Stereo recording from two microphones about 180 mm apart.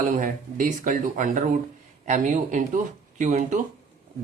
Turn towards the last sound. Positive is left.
turn(degrees=-40)  # may be behind; listen again after turning